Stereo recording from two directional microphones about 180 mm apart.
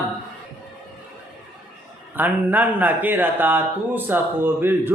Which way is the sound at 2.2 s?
10° right (ahead or behind).